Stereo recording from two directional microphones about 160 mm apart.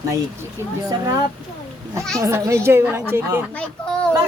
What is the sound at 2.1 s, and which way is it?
A woman's voice, 20° right (ahead or behind).